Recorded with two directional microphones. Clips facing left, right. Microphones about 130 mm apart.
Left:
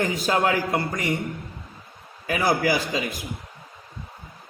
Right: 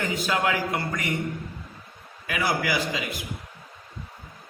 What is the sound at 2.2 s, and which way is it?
Speech, 35° left (ahead or behind).